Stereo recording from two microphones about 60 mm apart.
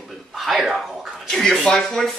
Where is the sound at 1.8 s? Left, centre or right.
Centre.